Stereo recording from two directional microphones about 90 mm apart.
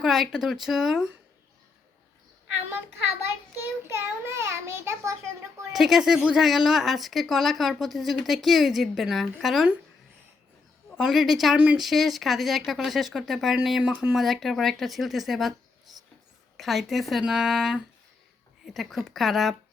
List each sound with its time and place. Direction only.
0.0 s speech: centre (ahead or behind)
3.6 s a sound: 25° right (ahead or behind)
5.7 s speech: 5° right (ahead or behind)
10.9 s speech: centre (ahead or behind)
11.9 s speech: centre (ahead or behind)
14.2 s speech: centre (ahead or behind)
16.6 s speech: centre (ahead or behind)